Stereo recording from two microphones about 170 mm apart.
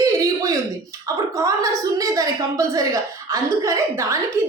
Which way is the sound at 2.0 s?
20° right (ahead or behind).